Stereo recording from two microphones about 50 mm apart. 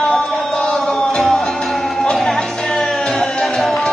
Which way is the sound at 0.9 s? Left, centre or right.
Centre.